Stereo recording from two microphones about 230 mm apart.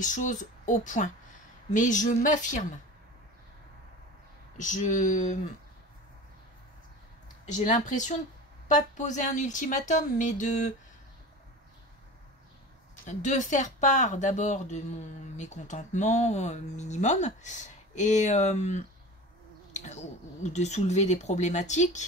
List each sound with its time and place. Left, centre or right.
0.0 s speech: left
4.6 s speech: left
7.4 s speech: left
13.0 s speech: left